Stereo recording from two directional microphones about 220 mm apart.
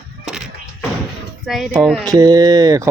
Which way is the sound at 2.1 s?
15° right (ahead or behind).